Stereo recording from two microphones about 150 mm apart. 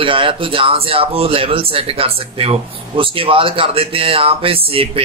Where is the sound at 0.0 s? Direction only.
35° right (ahead or behind).